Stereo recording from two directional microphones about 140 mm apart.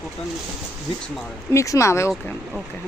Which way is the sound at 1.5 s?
20° left (ahead or behind).